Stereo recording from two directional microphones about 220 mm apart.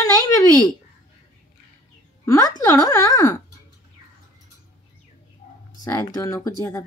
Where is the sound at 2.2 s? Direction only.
15° left (ahead or behind).